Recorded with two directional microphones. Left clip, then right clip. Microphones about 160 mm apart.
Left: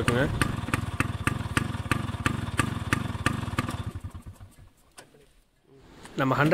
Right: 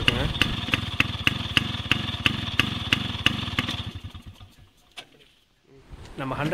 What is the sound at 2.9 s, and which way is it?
Vehicle, 20° left (ahead or behind).